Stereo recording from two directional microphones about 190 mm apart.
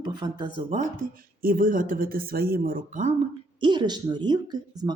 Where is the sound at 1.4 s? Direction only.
50° right (ahead or behind).